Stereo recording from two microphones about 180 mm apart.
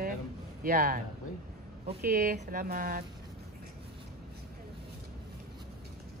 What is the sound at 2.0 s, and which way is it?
Speech, 50° right (ahead or behind).